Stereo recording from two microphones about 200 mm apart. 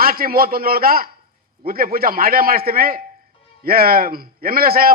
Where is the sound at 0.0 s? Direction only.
45° right (ahead or behind).